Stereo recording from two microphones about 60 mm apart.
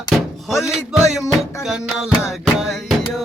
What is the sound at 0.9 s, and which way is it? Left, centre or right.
Music, centre.